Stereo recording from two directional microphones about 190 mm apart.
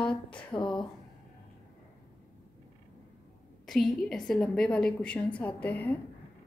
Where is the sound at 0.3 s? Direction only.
25° left (ahead or behind).